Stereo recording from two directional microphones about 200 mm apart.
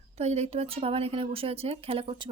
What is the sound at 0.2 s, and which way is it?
Speech, 30° right (ahead or behind).